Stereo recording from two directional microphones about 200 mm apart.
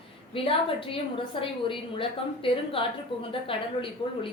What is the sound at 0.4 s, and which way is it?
A woman's voice, 25° left (ahead or behind).